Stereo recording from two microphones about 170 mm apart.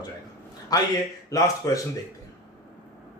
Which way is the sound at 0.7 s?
20° left (ahead or behind).